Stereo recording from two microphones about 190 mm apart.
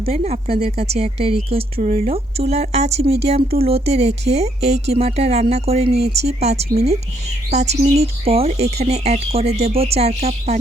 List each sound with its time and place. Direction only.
0.0 s a woman's voice: 35° right (ahead or behind)